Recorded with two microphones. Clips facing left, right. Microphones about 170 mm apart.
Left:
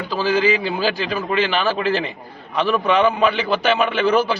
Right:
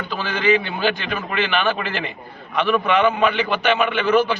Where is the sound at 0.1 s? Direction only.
35° left (ahead or behind).